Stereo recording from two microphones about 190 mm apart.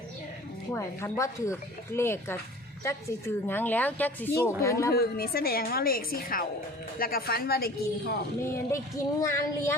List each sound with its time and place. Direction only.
0.7 s a woman's voice: 15° left (ahead or behind)
4.9 s a woman's voice: 55° left (ahead or behind)
8.4 s a woman's voice: 15° left (ahead or behind)